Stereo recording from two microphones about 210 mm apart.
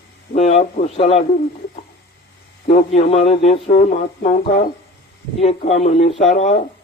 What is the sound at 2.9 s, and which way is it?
Speech, 30° left (ahead or behind).